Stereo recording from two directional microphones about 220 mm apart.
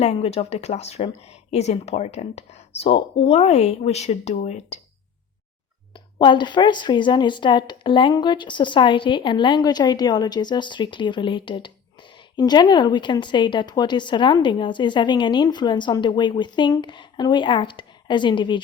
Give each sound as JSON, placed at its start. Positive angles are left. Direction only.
{"t": 0.0, "sound": "a woman's voice", "side_deg": 30}
{"t": 5.9, "sound": "a woman's voice", "side_deg": 20}